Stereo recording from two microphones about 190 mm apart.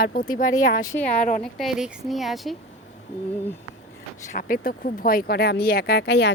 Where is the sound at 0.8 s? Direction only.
10° left (ahead or behind).